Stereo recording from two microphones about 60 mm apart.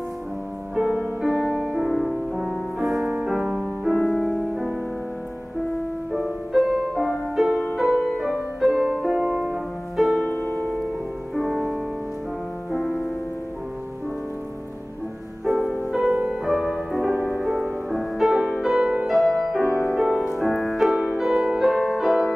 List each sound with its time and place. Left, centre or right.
1.2 s music: centre
6.1 s music: centre
9.2 s music: centre
9.9 s music: centre
11.3 s music: centre
15.4 s music: centre
16.1 s music: right
16.4 s music: centre